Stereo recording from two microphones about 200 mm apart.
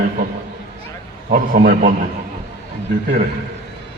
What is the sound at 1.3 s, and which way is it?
Speech, 45° right (ahead or behind).